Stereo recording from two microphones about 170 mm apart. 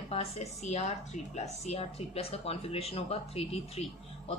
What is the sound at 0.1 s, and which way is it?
A woman's voice, 35° left (ahead or behind).